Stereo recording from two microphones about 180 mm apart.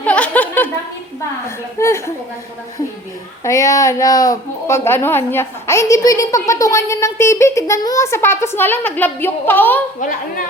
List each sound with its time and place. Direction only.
0.0 s a sound: 10° left (ahead or behind)
1.8 s a woman's voice: 15° left (ahead or behind)
3.4 s a woman's voice: 20° left (ahead or behind)